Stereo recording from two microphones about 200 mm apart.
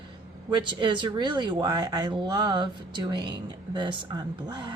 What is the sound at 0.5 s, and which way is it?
Speech, 20° right (ahead or behind).